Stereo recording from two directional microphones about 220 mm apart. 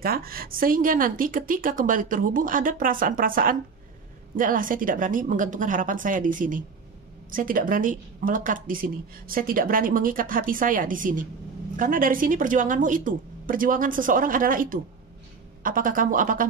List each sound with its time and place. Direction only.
0.0 s a woman's voice: 40° right (ahead or behind)